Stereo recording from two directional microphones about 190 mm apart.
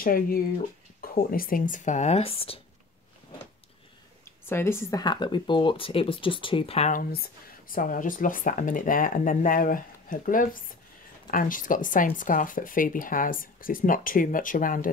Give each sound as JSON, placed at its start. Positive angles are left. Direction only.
{"t": 0.0, "sound": "speech", "side_deg": 50}
{"t": 4.2, "sound": "speech", "side_deg": 10}